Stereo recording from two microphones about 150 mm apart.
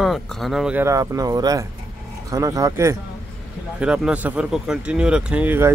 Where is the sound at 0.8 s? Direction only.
25° right (ahead or behind).